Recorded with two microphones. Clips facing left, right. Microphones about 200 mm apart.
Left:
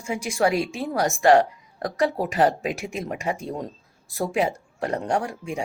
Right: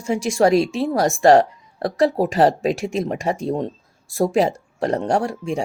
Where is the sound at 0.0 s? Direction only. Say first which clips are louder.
Right 6 dB; 35° right (ahead or behind).